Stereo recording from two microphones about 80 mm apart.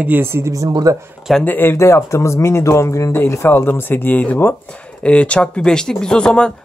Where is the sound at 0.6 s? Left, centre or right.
Right.